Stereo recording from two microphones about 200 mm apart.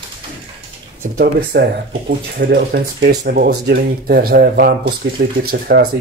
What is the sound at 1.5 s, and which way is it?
Speech, 60° right (ahead or behind).